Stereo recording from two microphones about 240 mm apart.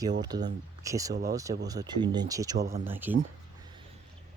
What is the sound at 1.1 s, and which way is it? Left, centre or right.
Speech, right.